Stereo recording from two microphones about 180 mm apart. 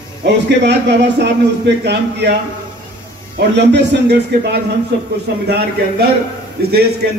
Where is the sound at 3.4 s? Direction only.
70° right (ahead or behind).